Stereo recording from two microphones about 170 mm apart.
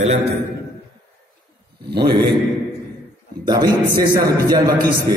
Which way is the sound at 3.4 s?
25° right (ahead or behind).